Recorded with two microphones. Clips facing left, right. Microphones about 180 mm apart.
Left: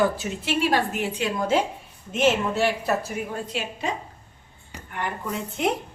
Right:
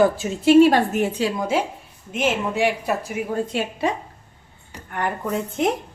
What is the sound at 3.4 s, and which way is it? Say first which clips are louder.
Speech: right 6 dB; 55° right (ahead or behind).